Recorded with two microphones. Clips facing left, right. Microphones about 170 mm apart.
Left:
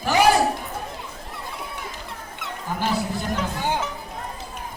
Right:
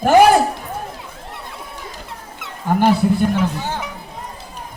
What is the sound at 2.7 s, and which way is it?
Speech, 60° right (ahead or behind).